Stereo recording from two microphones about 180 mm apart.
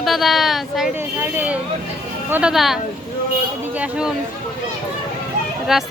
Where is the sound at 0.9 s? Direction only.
10° right (ahead or behind).